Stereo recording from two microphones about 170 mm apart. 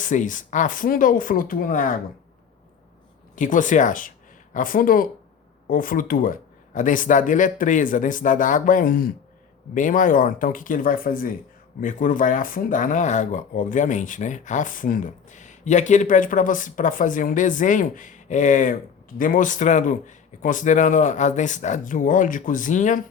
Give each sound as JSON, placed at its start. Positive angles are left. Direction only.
{"t": 0.0, "sound": "speech", "side_deg": 50}
{"t": 3.3, "sound": "speech", "side_deg": 50}